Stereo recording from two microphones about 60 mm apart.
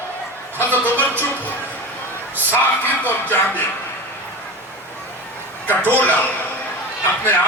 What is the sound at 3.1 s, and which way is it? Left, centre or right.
Speech, left.